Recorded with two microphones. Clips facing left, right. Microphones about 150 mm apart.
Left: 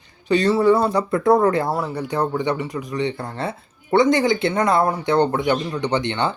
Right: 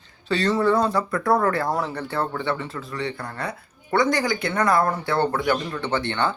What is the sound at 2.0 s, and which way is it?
Speech, 15° left (ahead or behind).